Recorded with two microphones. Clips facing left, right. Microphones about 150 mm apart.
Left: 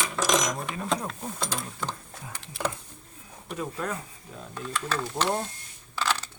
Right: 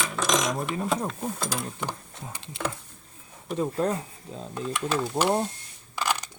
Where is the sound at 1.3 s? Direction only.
5° right (ahead or behind).